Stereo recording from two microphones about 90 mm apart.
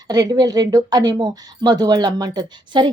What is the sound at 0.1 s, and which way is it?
Speech, 50° right (ahead or behind).